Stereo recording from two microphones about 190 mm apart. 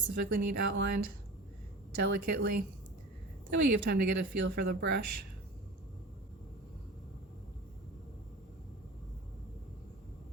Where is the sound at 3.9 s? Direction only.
60° right (ahead or behind).